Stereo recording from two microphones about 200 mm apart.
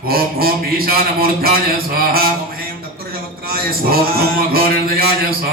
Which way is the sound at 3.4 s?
50° right (ahead or behind).